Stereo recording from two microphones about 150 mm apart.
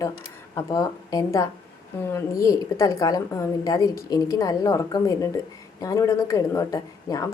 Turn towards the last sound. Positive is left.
turn(degrees=20)  # may be behind; listen again after turning